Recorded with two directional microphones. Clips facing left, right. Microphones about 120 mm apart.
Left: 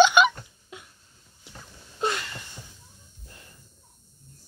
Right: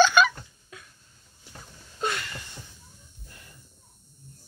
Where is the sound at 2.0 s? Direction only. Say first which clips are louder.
Left 2 dB; 25° left (ahead or behind).